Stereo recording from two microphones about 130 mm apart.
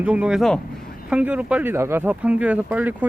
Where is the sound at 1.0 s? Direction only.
10° right (ahead or behind).